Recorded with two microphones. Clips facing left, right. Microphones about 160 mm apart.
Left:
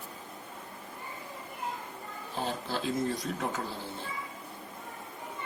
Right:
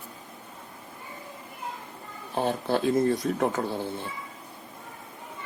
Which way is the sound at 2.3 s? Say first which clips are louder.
Right 8 dB; 60° right (ahead or behind).